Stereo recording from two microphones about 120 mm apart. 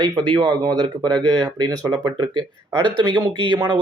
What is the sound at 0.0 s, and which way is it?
Speech, 35° right (ahead or behind).